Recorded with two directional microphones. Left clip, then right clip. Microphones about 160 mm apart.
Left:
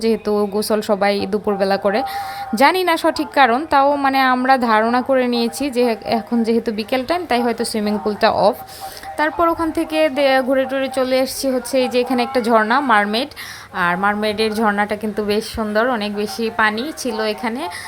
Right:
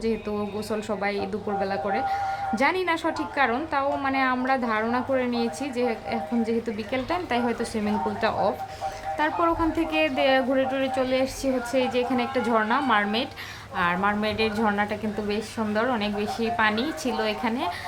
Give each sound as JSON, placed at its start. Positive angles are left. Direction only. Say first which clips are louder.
{"t": 0.0, "sound": "a woman's voice", "louder": "left 10 dB", "side_deg": 45}
{"t": 9.1, "sound": "a woman's voice", "louder": "left 7 dB", "side_deg": 35}